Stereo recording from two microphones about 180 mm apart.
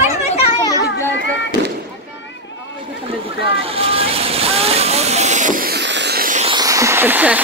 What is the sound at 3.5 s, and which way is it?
Vehicle, 30° right (ahead or behind).